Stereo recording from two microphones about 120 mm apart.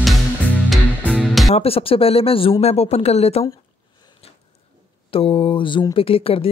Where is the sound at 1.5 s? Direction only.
55° left (ahead or behind).